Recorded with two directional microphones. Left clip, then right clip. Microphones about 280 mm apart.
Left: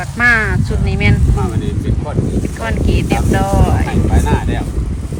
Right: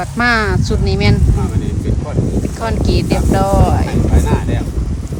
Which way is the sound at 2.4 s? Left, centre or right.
Centre.